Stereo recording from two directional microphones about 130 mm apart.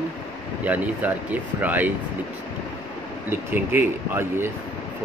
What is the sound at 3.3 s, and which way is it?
Speech, 15° right (ahead or behind).